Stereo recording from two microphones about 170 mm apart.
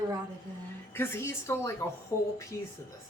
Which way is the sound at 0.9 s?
15° left (ahead or behind).